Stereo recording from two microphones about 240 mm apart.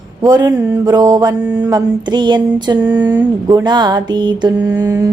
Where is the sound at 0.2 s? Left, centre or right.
Centre.